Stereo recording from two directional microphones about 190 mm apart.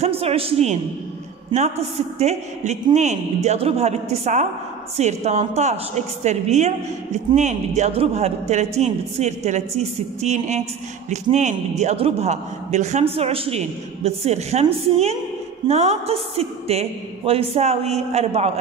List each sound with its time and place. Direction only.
0.0 s a woman's voice: 30° right (ahead or behind)